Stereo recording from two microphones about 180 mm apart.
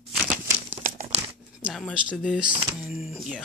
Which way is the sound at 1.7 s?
Centre (ahead or behind).